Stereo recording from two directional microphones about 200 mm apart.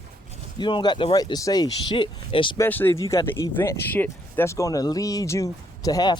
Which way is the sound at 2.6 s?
10° left (ahead or behind).